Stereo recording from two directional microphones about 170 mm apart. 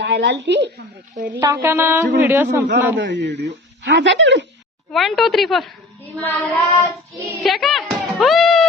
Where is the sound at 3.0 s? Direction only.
90° right.